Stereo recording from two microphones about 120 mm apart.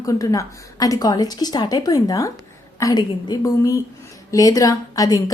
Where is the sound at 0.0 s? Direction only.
30° left (ahead or behind).